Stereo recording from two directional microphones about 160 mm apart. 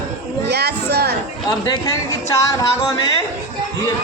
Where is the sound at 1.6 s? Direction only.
20° left (ahead or behind).